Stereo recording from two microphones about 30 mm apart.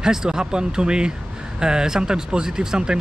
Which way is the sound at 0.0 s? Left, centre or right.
Right.